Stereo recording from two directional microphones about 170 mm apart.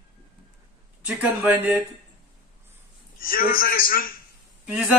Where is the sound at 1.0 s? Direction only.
5° right (ahead or behind).